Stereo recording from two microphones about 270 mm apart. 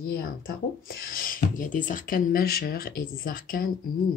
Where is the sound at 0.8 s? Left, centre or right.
Left.